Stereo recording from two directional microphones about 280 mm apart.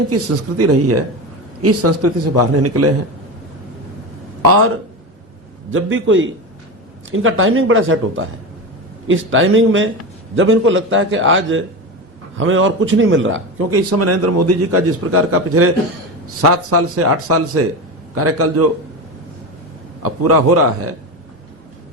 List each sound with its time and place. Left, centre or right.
0.1 s a man's voice: right
5.7 s a man's voice: right
16.7 s a man's voice: right
20.0 s a man's voice: right